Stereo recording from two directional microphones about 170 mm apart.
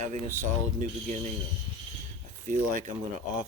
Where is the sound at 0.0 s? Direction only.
45° right (ahead or behind).